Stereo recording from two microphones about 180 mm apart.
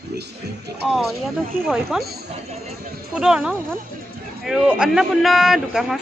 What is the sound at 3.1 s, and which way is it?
A woman's voice, 5° right (ahead or behind).